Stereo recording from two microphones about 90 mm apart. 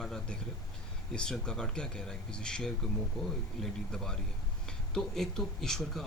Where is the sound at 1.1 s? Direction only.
10° left (ahead or behind).